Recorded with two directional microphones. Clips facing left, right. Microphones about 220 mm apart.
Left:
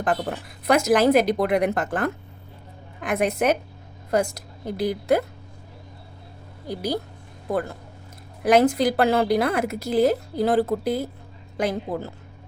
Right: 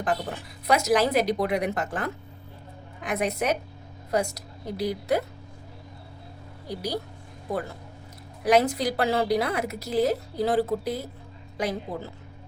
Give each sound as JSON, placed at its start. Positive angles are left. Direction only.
{"t": 0.0, "sound": "a woman's voice", "side_deg": 55}
{"t": 6.7, "sound": "a woman's voice", "side_deg": 50}